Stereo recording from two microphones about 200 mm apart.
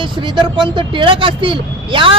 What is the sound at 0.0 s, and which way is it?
Speech, 25° right (ahead or behind).